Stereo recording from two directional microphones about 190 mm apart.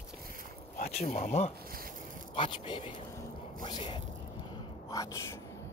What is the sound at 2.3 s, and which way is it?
Speech, 25° left (ahead or behind).